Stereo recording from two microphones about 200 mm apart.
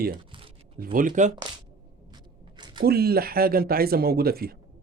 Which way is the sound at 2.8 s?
50° right (ahead or behind).